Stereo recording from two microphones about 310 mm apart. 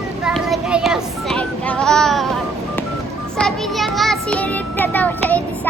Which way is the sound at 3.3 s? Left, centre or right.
Centre.